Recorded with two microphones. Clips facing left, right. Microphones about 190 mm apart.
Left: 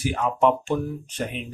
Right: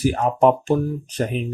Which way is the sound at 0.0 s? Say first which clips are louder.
Right 5 dB; 40° right (ahead or behind).